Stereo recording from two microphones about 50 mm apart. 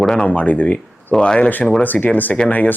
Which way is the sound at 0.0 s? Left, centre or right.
Centre.